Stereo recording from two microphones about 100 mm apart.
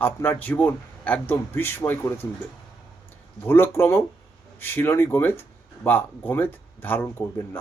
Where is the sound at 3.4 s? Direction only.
25° left (ahead or behind).